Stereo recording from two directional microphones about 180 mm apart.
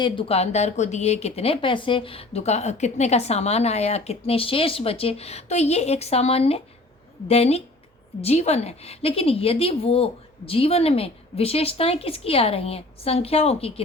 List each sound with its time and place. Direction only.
0.0 s speech: 30° left (ahead or behind)